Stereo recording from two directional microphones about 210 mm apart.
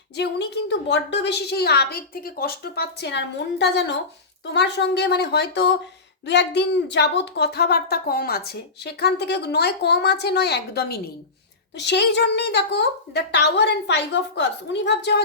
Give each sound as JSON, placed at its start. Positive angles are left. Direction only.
{"t": 0.2, "sound": "a woman's voice", "side_deg": 55}